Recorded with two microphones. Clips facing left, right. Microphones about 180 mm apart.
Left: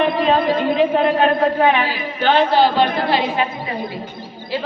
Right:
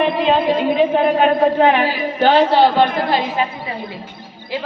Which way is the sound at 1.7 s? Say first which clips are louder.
Right 3 dB; 45° right (ahead or behind).